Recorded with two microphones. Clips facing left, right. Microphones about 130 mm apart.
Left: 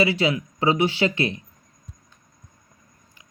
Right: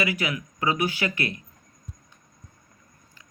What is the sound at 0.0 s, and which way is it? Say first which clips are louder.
Speech: left 6 dB; 30° left (ahead or behind).